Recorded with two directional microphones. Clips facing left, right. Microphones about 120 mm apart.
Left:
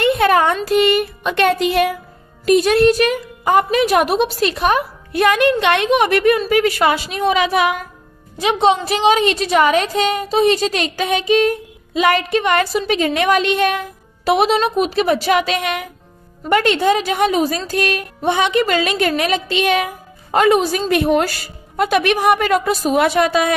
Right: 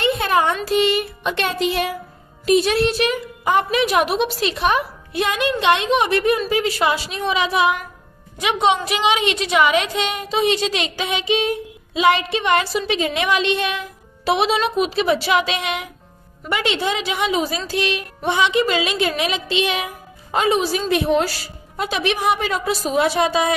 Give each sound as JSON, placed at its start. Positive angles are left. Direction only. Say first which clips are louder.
{"t": 0.0, "sound": "a sound", "louder": "left 4 dB", "side_deg": 55}
{"t": 0.7, "sound": "a woman's voice", "louder": "left 4 dB", "side_deg": 55}
{"t": 8.4, "sound": "a woman's voice", "louder": "left 3 dB", "side_deg": 35}